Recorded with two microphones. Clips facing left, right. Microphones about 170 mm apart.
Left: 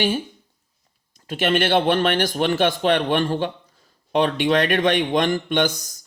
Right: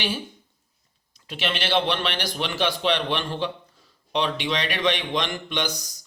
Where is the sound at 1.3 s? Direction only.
50° left (ahead or behind).